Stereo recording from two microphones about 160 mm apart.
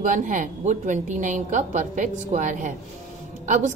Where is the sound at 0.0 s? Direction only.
55° right (ahead or behind).